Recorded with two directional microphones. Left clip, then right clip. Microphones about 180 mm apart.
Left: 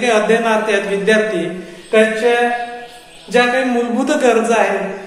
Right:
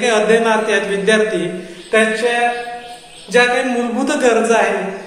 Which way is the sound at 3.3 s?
20° left (ahead or behind).